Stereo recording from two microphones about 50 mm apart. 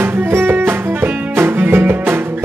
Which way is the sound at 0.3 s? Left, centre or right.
Right.